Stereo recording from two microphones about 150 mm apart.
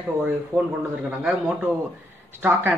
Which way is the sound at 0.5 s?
20° right (ahead or behind).